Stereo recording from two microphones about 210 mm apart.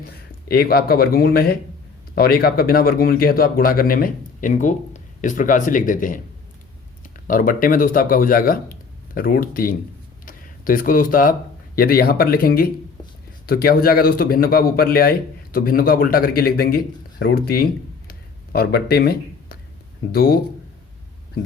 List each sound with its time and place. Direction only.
0.0 s a man's voice: 45° left (ahead or behind)
7.3 s speech: 40° left (ahead or behind)
18.1 s a sound: 45° left (ahead or behind)
20.1 s speech: 45° left (ahead or behind)